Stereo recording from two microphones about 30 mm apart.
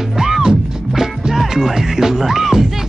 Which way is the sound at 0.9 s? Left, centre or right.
Centre.